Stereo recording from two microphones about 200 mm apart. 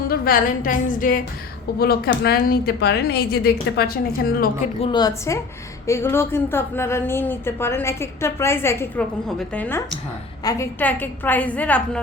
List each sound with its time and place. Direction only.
0.1 s a woman's voice: 45° left (ahead or behind)
4.8 s a woman's voice: 20° left (ahead or behind)